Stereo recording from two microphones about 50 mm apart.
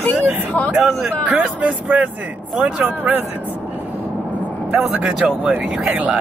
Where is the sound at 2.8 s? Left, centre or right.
Right.